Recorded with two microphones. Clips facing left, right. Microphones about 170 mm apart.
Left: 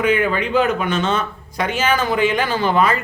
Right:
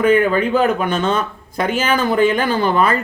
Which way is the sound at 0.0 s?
50° right (ahead or behind).